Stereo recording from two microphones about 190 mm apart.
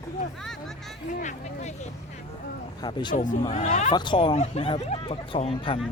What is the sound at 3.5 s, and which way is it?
Speech, 35° left (ahead or behind).